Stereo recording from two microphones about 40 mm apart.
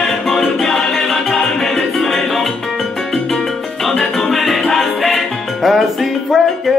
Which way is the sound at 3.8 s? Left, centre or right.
Centre.